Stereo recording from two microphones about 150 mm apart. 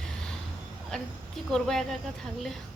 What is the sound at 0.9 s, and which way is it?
Speech, 5° left (ahead or behind).